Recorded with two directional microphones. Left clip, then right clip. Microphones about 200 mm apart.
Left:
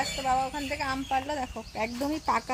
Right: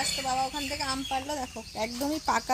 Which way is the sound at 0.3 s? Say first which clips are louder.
Left 2 dB; 15° right (ahead or behind).